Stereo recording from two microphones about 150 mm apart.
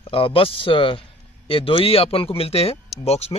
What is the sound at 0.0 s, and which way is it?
Speech, 35° left (ahead or behind).